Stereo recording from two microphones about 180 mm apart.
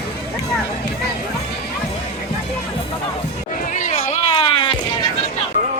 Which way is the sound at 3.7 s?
40° left (ahead or behind).